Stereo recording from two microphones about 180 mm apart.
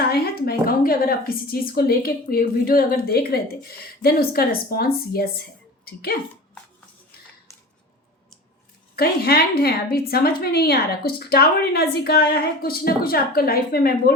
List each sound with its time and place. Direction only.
0.0 s a woman's voice: 60° left (ahead or behind)
9.0 s a woman's voice: 60° left (ahead or behind)